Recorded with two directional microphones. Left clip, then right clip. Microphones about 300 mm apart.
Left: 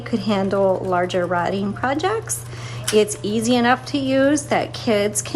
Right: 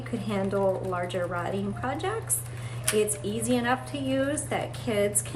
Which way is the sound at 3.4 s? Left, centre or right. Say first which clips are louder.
Left 9 dB; centre.